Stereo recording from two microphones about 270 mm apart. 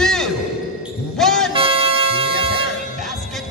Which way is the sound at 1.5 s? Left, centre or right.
Centre.